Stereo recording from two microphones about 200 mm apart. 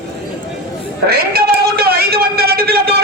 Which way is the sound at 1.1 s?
50° right (ahead or behind).